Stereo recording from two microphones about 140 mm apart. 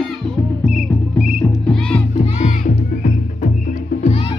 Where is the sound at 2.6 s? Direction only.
65° left (ahead or behind).